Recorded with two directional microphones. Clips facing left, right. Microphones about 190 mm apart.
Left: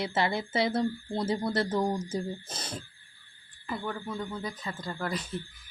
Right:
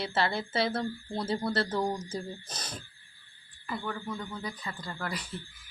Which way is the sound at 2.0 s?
25° left (ahead or behind).